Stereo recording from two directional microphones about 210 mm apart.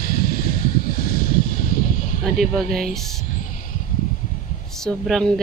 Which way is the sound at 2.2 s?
Centre (ahead or behind).